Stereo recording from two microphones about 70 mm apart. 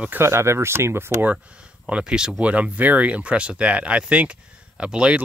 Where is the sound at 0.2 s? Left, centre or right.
Right.